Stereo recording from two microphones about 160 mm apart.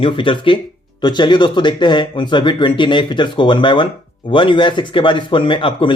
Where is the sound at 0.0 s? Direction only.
30° left (ahead or behind).